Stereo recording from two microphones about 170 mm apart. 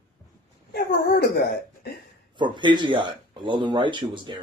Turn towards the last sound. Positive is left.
turn(degrees=-30)  # may be behind; listen again after turning